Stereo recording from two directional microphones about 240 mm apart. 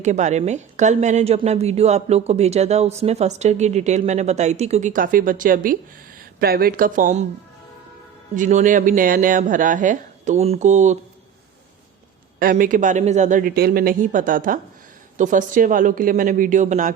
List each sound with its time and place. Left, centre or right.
0.0 s a woman's voice: right
8.4 s speech: right
12.4 s speech: right